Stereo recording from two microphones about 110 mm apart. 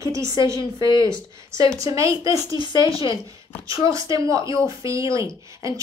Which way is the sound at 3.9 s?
30° right (ahead or behind).